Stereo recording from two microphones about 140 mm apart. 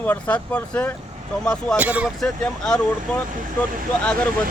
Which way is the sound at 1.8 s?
10° right (ahead or behind).